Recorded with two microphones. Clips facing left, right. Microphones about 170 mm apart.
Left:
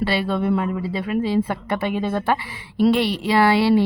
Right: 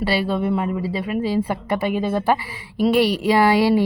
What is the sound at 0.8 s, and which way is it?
Speech, 40° right (ahead or behind).